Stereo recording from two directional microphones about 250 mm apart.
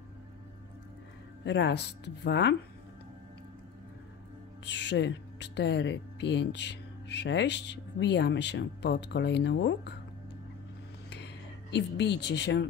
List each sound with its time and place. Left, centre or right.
1.4 s speech: left
4.6 s speech: left
11.7 s speech: left